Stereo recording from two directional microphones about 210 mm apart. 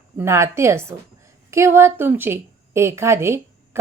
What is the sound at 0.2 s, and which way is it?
A woman's voice, 15° right (ahead or behind).